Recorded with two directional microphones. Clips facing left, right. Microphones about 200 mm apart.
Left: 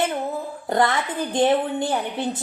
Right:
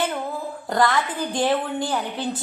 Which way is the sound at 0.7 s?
25° left (ahead or behind).